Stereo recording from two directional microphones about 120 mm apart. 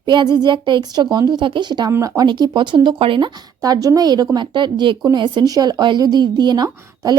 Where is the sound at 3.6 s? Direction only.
30° right (ahead or behind).